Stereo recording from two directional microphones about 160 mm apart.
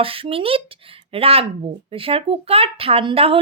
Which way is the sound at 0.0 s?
35° right (ahead or behind).